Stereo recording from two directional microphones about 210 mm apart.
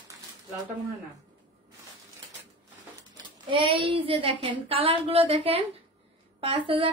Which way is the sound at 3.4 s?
25° right (ahead or behind).